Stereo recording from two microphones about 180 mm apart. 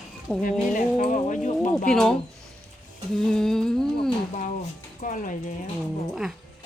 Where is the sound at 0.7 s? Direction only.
45° left (ahead or behind).